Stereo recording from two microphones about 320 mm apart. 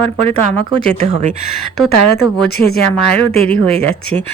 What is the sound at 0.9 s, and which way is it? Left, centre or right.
Speech, right.